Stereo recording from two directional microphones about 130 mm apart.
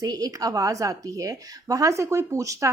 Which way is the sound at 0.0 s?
30° right (ahead or behind).